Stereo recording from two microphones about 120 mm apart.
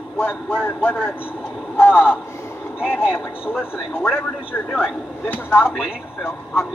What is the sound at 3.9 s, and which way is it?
Speech, 15° left (ahead or behind).